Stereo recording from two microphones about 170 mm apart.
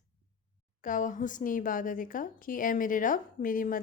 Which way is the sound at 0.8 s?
50° left (ahead or behind).